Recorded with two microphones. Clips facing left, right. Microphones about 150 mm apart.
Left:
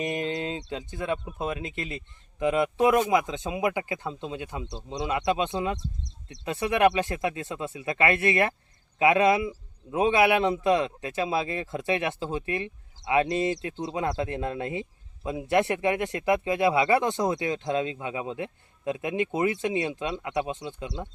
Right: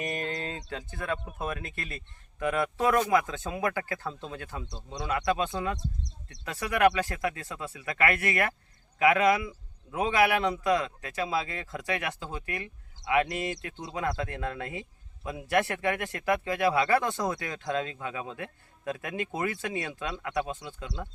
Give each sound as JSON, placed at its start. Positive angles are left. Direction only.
{"t": 0.0, "sound": "a man's voice", "side_deg": 20}